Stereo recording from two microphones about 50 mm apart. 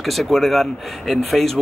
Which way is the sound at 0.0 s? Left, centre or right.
Centre.